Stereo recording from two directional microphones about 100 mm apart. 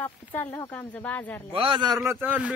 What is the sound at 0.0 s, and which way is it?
Speech, 20° left (ahead or behind).